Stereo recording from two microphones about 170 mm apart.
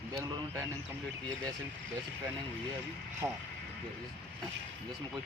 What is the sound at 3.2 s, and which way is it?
Speech, 20° right (ahead or behind).